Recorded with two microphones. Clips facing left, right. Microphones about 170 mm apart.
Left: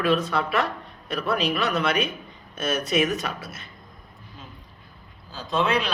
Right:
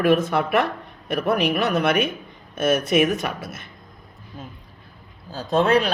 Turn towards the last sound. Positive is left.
turn(degrees=-50)  # may be behind; listen again after turning